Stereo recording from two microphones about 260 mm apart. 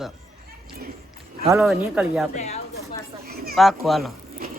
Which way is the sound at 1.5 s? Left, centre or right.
Centre.